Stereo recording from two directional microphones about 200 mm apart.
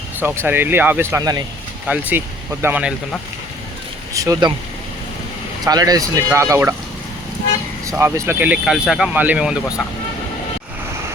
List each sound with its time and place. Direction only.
0.2 s speech: 10° right (ahead or behind)
4.1 s speech: 15° right (ahead or behind)
5.6 s speech: 20° right (ahead or behind)
7.9 s speech: 15° right (ahead or behind)